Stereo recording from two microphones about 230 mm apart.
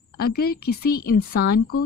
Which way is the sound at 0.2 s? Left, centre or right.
Left.